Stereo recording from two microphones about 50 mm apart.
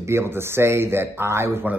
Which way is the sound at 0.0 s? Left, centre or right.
Right.